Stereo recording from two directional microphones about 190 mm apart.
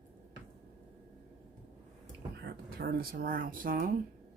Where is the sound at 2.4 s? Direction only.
55° right (ahead or behind).